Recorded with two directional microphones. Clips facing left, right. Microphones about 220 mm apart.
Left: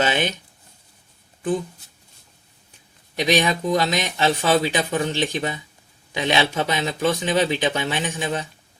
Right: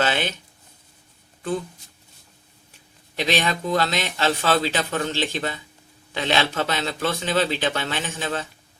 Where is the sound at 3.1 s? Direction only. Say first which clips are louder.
Left 3 dB; 15° left (ahead or behind).